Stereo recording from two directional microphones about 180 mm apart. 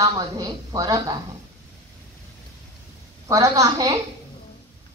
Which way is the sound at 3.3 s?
20° right (ahead or behind).